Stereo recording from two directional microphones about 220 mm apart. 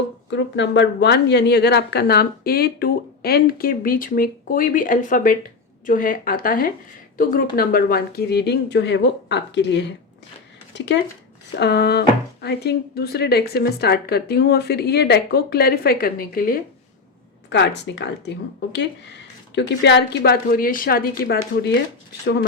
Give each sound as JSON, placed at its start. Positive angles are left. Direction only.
{"t": 0.3, "sound": "a woman's voice", "side_deg": 55}
{"t": 17.5, "sound": "a woman's voice", "side_deg": 50}